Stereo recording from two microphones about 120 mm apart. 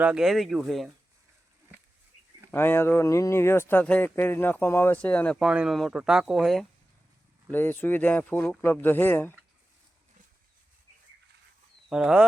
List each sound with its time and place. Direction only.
0.0 s speech: 5° right (ahead or behind)
2.5 s speech: 20° left (ahead or behind)
5.4 s speech: 5° right (ahead or behind)
7.5 s speech: 15° left (ahead or behind)
11.9 s speech: 5° right (ahead or behind)